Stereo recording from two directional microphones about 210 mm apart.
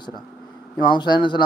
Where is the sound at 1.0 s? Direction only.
20° left (ahead or behind).